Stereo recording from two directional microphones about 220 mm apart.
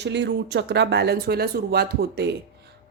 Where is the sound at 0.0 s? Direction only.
50° right (ahead or behind).